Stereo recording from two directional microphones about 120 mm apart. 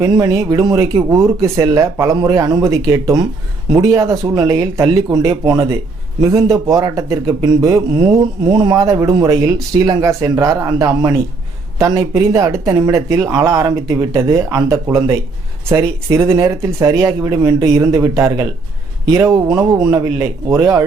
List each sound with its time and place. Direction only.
0.0 s speech: 30° right (ahead or behind)